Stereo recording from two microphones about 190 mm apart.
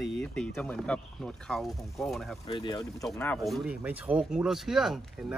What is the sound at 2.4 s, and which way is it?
Speech, 25° left (ahead or behind).